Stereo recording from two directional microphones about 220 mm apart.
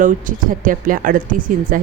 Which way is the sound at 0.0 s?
35° right (ahead or behind).